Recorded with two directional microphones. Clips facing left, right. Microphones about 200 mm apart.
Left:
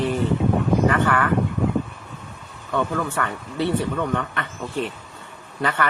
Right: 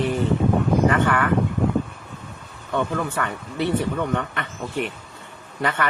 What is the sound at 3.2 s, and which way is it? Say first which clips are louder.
Speech: left 1 dB; 20° right (ahead or behind).